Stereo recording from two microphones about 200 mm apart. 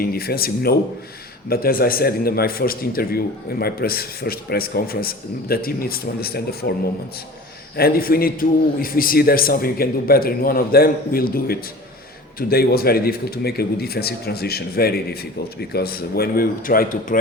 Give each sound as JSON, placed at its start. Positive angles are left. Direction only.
{"t": 0.0, "sound": "a man's voice", "side_deg": 50}
{"t": 7.8, "sound": "a man's voice", "side_deg": 50}